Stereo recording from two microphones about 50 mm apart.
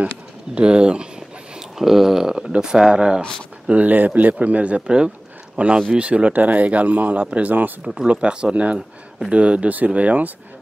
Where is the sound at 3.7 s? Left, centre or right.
Right.